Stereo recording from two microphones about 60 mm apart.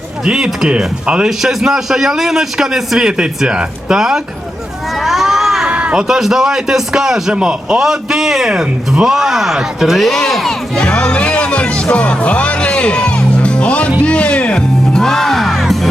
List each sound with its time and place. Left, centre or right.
0.3 s a man's voice: centre
5.0 s a sound: centre
5.6 s a man's voice: centre
10.8 s music: centre
14.9 s music: centre